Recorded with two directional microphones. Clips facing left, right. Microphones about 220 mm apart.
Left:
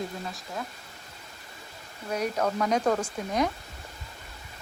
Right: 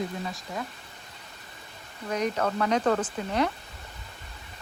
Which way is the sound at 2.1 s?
10° left (ahead or behind).